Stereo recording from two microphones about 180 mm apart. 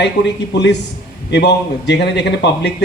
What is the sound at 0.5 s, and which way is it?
A man's voice, 75° left (ahead or behind).